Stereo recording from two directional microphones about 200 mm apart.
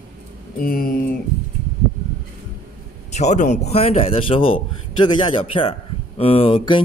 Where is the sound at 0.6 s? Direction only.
45° left (ahead or behind).